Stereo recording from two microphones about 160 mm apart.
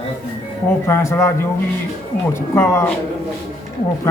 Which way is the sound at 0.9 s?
15° left (ahead or behind).